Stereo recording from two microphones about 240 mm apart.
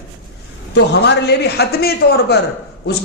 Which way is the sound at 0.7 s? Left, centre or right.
Left.